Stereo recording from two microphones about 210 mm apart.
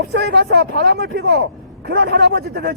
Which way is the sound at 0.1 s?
50° right (ahead or behind).